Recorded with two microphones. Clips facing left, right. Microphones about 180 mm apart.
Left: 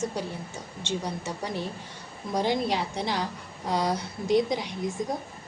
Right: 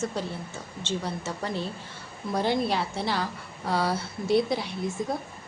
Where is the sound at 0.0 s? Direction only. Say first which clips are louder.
Even; 15° left (ahead or behind).